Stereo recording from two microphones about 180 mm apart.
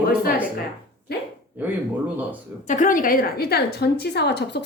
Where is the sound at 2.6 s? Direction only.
45° left (ahead or behind).